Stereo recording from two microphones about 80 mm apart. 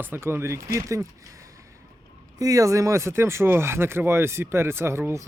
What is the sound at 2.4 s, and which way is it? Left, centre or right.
Speech, right.